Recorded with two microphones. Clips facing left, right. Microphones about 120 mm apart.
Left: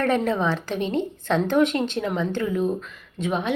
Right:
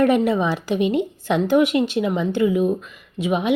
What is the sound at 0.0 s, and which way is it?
Speech, 10° right (ahead or behind).